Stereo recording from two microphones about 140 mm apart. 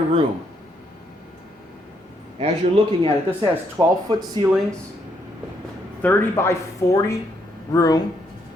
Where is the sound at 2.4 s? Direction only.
40° right (ahead or behind).